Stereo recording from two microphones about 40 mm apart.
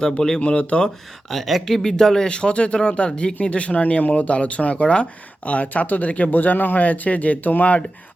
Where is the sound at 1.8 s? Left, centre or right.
Centre.